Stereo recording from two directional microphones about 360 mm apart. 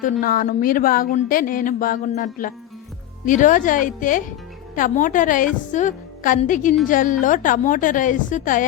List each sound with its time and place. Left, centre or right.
0.0 s speech: left